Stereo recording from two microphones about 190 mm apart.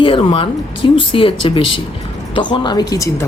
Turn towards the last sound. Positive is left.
turn(degrees=15)  # may be behind; listen again after turning